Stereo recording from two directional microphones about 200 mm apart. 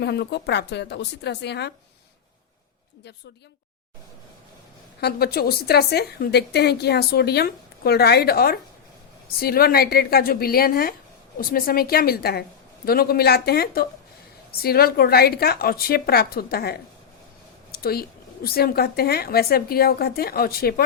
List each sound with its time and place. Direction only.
0.0 s a woman's voice: 55° left (ahead or behind)
4.9 s a woman's voice: 50° left (ahead or behind)
17.7 s a sound: 50° left (ahead or behind)
18.4 s a woman's voice: 50° left (ahead or behind)